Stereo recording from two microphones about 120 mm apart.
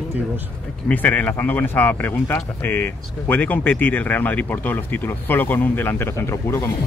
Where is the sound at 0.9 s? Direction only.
15° left (ahead or behind).